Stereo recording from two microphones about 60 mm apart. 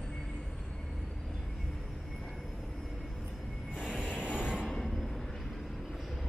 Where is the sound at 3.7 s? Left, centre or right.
Centre.